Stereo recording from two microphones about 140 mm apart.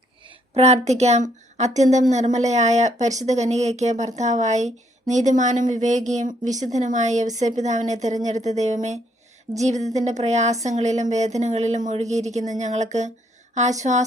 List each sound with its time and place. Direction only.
0.5 s speech: 50° right (ahead or behind)